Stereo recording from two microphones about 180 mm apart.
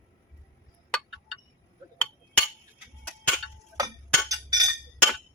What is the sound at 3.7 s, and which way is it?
Chink, 20° right (ahead or behind).